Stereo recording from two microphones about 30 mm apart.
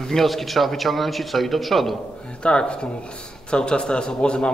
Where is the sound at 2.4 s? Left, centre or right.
Left.